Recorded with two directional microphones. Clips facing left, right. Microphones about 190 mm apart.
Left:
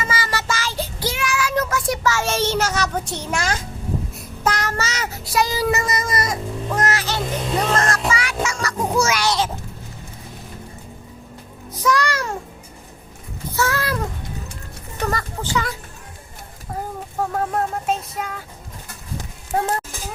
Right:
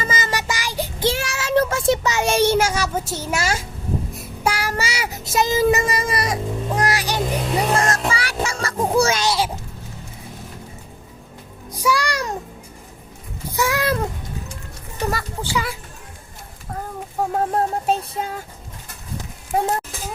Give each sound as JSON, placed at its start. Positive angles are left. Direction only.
{"t": 0.0, "sound": "child singing", "side_deg": -25}
{"t": 1.0, "sound": "child singing", "side_deg": -30}
{"t": 7.9, "sound": "music", "side_deg": -30}
{"t": 9.2, "sound": "a sound", "side_deg": -10}
{"t": 11.7, "sound": "music", "side_deg": -10}
{"t": 13.5, "sound": "a sound", "side_deg": -15}
{"t": 15.1, "sound": "speech", "side_deg": -10}
{"t": 17.3, "sound": "a sound", "side_deg": -35}
{"t": 19.5, "sound": "speech", "side_deg": -10}